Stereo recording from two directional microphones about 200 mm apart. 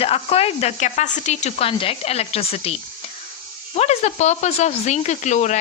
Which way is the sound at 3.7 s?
35° left (ahead or behind).